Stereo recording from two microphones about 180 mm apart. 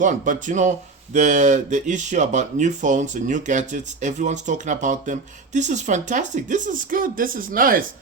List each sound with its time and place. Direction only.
0.0 s speech: 45° right (ahead or behind)